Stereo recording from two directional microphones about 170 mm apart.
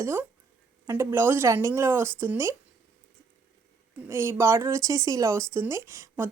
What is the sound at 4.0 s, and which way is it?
Speech, 15° right (ahead or behind).